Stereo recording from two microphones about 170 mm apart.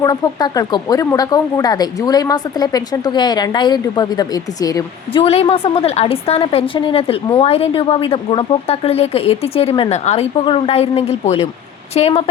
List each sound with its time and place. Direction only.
0.0 s speech: 25° left (ahead or behind)
5.2 s a woman's voice: 35° left (ahead or behind)